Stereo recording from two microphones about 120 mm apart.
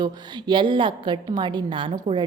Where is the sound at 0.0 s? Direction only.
35° right (ahead or behind).